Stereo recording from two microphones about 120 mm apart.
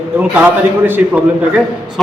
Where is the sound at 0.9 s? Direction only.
15° right (ahead or behind).